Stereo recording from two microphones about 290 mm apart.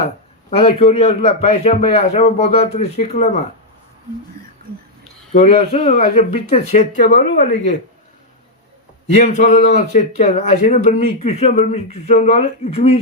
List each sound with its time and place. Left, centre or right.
0.5 s a man's voice: centre
5.3 s a man's voice: left
9.1 s a man's voice: left